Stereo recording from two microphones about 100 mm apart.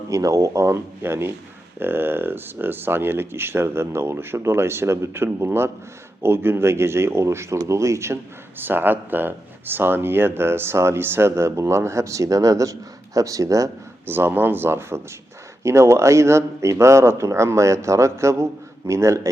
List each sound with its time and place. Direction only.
0.1 s speech: 30° right (ahead or behind)
14.1 s speech: 20° right (ahead or behind)